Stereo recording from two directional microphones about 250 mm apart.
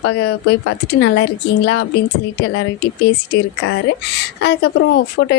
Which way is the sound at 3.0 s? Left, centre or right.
Left.